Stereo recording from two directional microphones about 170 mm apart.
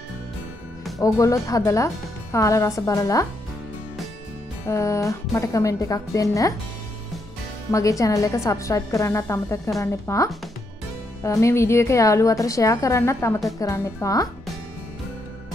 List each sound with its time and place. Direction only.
0.9 s a woman's voice: 20° left (ahead or behind)
4.6 s a woman's voice: 15° left (ahead or behind)
7.7 s a woman's voice: 20° left (ahead or behind)